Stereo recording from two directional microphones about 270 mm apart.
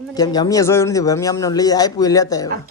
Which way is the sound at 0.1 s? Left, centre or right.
Centre.